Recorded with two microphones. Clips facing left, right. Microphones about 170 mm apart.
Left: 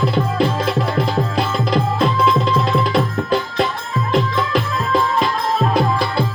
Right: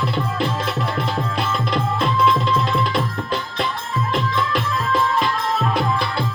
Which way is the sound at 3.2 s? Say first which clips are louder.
Left 6 dB; 45° left (ahead or behind).